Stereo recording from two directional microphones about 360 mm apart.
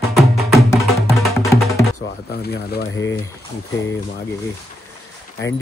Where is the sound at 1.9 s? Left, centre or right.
Left.